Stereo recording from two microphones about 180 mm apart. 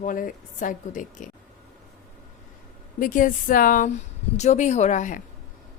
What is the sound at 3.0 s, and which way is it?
A woman's voice, 50° left (ahead or behind).